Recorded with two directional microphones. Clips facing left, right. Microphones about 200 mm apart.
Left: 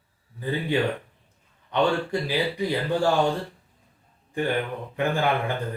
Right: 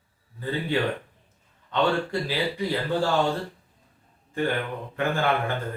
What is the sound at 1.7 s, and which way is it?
A man's voice, 15° left (ahead or behind).